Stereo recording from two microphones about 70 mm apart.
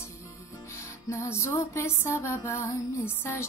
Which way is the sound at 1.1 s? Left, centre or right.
Left.